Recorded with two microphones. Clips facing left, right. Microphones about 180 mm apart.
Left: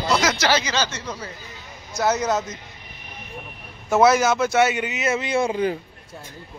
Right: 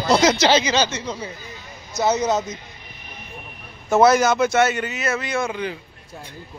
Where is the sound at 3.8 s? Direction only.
5° left (ahead or behind); by 5.8 s 40° left (ahead or behind).